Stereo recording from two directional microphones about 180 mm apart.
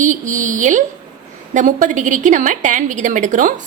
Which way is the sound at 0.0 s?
45° right (ahead or behind).